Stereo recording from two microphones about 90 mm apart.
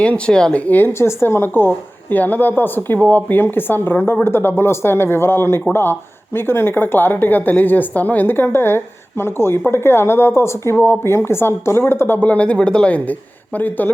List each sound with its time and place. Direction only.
0.0 s a woman's voice: 10° left (ahead or behind)